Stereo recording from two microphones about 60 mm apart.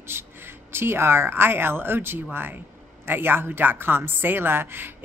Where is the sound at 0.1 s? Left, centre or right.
Right.